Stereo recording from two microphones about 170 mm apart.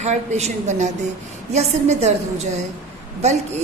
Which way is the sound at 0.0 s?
45° right (ahead or behind).